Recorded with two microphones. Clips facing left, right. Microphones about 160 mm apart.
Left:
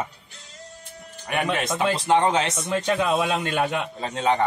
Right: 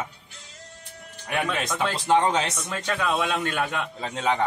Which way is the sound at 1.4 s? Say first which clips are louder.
Left 5 dB; 20° left (ahead or behind).